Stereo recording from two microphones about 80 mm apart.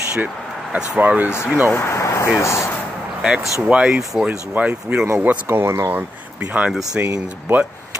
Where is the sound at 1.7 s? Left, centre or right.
Left.